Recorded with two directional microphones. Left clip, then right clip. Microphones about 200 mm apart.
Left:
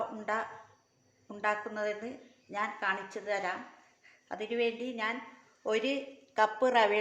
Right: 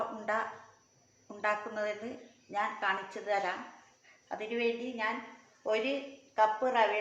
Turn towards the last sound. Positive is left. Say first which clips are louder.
# left 1 dB
turn(degrees=50)  # may be behind; listen again after turning